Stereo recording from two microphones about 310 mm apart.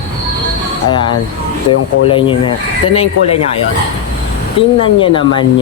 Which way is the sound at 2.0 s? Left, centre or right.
Centre.